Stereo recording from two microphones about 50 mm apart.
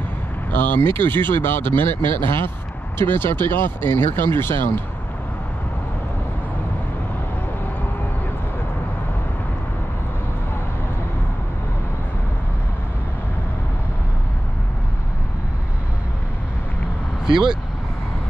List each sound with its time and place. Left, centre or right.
0.6 s speech: left